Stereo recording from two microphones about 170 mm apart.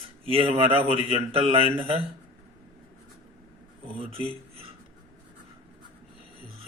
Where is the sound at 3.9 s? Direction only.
35° right (ahead or behind).